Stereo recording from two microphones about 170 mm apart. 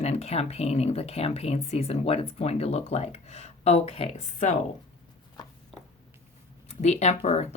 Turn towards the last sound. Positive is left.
turn(degrees=40)  # may be behind; listen again after turning